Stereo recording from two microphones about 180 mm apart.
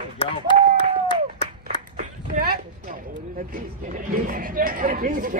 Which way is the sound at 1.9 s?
45° right (ahead or behind).